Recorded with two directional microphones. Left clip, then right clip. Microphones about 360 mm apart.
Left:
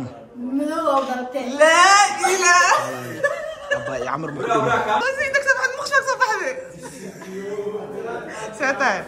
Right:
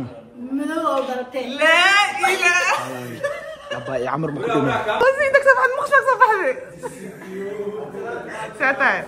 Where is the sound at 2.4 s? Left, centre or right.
Left.